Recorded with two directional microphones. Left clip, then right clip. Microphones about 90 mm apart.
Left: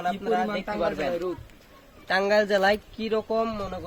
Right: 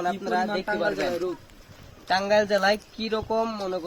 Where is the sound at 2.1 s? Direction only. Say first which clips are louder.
Even; 45° left (ahead or behind).